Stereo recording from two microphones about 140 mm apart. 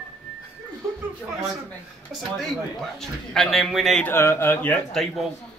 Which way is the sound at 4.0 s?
15° left (ahead or behind).